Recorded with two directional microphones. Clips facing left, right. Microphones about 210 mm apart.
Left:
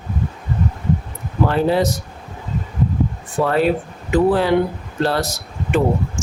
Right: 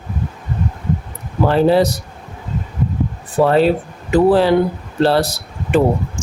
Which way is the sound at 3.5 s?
30° right (ahead or behind).